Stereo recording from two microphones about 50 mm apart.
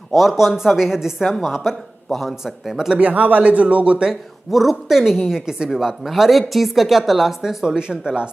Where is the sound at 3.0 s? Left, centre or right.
Right.